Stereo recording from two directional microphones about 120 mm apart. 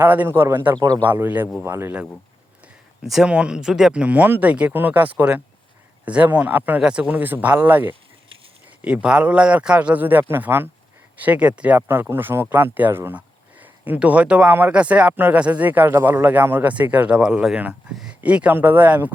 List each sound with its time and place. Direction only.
0.0 s speech: 15° right (ahead or behind)
3.0 s speech: 5° right (ahead or behind)